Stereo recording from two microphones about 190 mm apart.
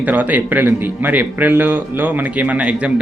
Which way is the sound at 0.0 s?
10° right (ahead or behind).